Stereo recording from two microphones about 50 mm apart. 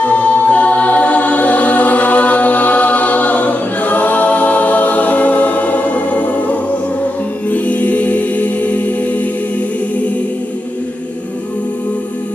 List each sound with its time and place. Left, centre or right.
0.0 s music: left